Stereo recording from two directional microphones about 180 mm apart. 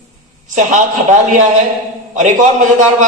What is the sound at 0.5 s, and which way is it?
A man's voice, 45° right (ahead or behind).